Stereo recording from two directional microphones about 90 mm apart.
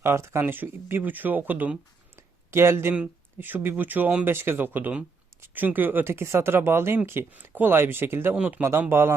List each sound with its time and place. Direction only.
0.0 s speech: 25° right (ahead or behind)
2.1 s a sound: 30° right (ahead or behind)
2.9 s speech: 15° right (ahead or behind)
8.4 s speech: 15° right (ahead or behind)
8.8 s speech: 25° right (ahead or behind)